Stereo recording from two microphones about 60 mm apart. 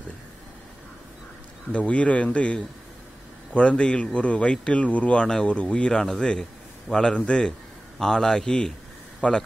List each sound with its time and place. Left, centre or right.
1.7 s a man's voice: centre